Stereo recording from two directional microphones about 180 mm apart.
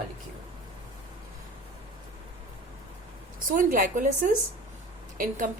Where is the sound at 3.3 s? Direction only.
50° right (ahead or behind).